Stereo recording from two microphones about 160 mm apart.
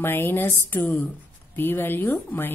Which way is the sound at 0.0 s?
15° left (ahead or behind).